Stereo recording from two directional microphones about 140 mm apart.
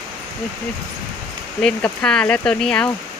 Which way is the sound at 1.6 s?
5° left (ahead or behind).